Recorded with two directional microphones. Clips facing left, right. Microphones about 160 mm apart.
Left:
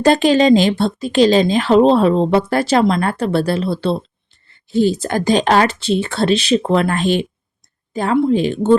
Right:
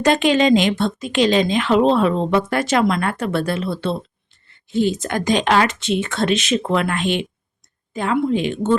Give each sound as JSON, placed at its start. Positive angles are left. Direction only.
{"t": 0.0, "sound": "speech", "side_deg": 35}